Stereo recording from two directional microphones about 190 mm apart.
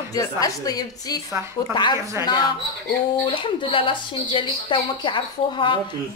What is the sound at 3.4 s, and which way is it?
A woman's voice, 25° left (ahead or behind).